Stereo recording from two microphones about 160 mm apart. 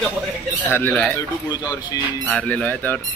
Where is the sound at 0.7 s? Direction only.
10° left (ahead or behind).